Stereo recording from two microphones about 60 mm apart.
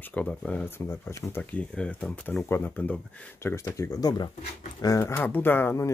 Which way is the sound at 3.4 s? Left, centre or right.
Left.